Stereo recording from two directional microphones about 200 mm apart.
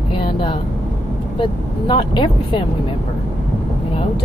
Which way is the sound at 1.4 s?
25° left (ahead or behind).